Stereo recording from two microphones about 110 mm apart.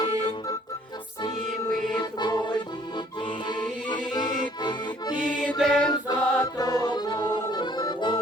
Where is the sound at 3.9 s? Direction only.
40° left (ahead or behind).